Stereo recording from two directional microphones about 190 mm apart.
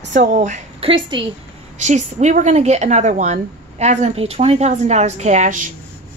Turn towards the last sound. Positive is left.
turn(degrees=-40)  # may be behind; listen again after turning